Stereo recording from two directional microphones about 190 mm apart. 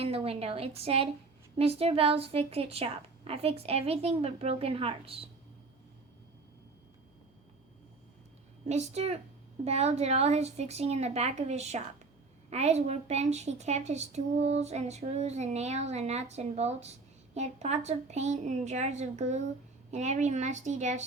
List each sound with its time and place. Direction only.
0.0 s a woman's voice: 30° right (ahead or behind)
8.6 s a woman's voice: 35° right (ahead or behind)